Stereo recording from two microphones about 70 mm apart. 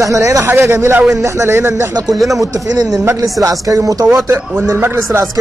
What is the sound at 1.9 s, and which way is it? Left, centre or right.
Speech, right.